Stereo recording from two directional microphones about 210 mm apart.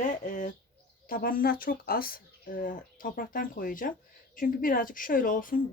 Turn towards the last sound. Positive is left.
turn(degrees=40)  # may be behind; listen again after turning